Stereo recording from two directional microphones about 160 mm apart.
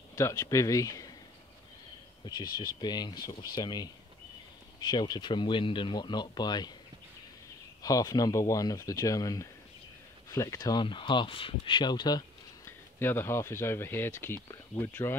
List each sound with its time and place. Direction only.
0.1 s speech: 20° left (ahead or behind)
2.2 s speech: 25° left (ahead or behind)
7.8 s speech: 20° left (ahead or behind)
12.6 s speech: 15° left (ahead or behind)